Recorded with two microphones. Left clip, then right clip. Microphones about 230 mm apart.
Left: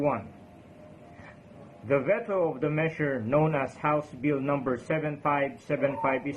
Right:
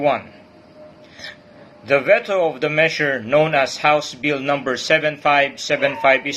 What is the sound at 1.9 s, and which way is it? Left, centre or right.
A man's voice, centre.